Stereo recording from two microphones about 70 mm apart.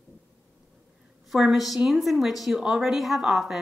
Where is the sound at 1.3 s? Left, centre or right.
Centre.